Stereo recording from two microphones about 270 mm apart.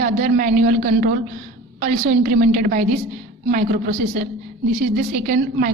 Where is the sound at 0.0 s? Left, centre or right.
Right.